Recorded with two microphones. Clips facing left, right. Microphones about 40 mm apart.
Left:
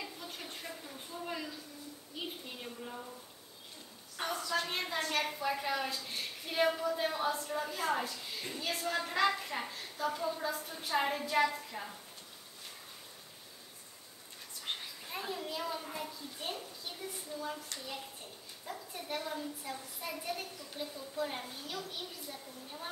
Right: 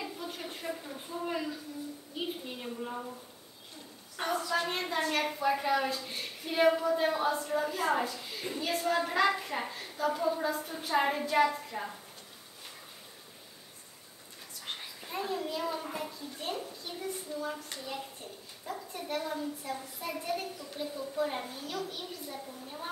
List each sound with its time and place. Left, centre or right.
0.0 s a sound: centre
4.2 s a woman's voice: centre
15.0 s a child's voice: centre
16.1 s a child's voice: centre
20.9 s a woman's voice: right
21.2 s a child's voice: centre